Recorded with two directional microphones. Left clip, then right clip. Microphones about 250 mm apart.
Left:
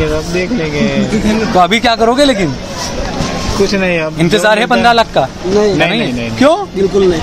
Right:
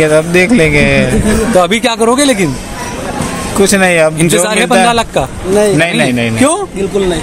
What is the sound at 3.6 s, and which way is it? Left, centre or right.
Speech, right.